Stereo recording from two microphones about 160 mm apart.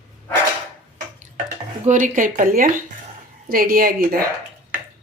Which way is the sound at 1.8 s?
50° right (ahead or behind).